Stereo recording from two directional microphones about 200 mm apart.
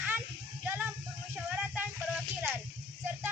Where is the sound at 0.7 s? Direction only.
10° right (ahead or behind).